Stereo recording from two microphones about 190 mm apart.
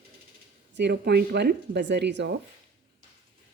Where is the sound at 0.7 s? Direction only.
60° right (ahead or behind).